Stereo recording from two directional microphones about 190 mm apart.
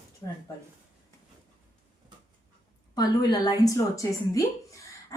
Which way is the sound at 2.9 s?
20° left (ahead or behind).